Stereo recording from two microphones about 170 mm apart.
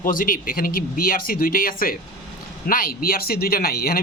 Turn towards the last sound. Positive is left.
turn(degrees=65)  # may be behind; listen again after turning